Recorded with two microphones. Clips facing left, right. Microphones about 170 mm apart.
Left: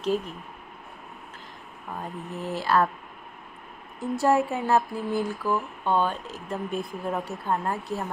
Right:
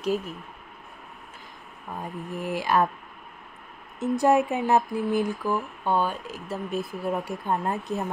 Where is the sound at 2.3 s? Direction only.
10° right (ahead or behind).